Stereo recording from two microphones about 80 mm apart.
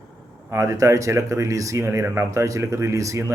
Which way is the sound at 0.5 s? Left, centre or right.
Right.